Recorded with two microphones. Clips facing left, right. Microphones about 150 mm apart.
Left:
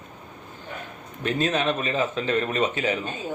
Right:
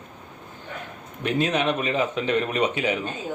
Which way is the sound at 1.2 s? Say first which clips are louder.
Right 1 dB; 15° right (ahead or behind).